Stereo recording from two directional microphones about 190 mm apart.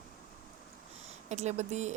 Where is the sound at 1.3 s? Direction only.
35° right (ahead or behind).